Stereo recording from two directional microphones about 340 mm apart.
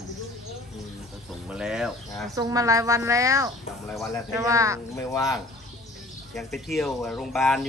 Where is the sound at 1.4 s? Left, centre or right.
Centre.